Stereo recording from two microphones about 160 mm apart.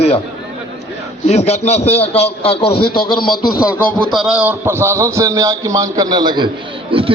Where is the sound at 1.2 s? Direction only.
45° left (ahead or behind).